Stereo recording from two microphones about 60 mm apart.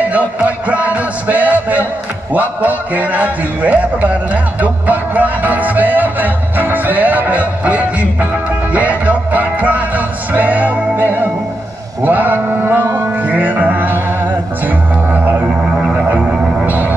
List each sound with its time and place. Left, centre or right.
0.0 s music: right
2.3 s a man's voice: right
8.7 s music: right
15.1 s music: right
15.6 s music: centre